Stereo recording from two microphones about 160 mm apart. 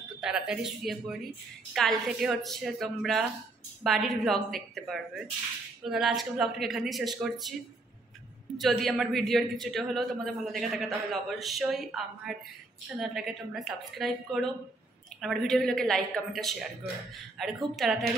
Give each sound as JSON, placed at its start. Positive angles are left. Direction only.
{"t": 0.2, "sound": "a woman's voice", "side_deg": -5}
{"t": 8.5, "sound": "a woman's voice", "side_deg": 0}